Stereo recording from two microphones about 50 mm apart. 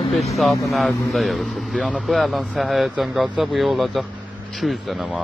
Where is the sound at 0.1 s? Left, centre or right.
Centre.